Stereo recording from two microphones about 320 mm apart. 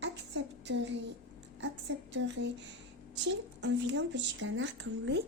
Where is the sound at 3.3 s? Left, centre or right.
Right.